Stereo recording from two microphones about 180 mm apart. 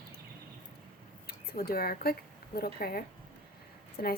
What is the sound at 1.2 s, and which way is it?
A woman's voice, 60° left (ahead or behind).